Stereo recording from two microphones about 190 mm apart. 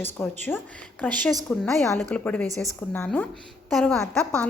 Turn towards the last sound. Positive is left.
turn(degrees=5)  # may be behind; listen again after turning